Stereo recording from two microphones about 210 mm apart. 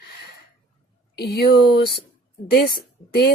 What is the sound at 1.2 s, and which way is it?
Speech, 50° left (ahead or behind).